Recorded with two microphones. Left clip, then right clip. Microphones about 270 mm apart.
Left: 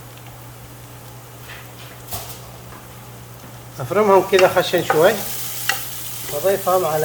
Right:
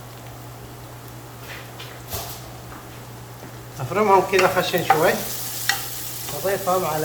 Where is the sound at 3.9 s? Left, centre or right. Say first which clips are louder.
Left 3 dB; left.